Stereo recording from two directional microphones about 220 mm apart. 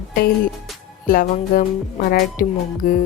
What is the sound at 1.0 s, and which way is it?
Speech, 40° left (ahead or behind).